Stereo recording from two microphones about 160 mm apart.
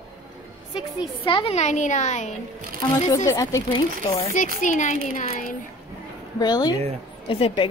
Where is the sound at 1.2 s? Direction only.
35° left (ahead or behind).